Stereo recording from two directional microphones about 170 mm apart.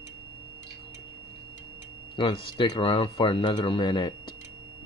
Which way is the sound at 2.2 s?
30° left (ahead or behind).